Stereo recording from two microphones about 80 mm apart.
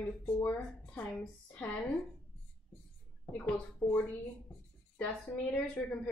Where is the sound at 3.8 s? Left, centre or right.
Left.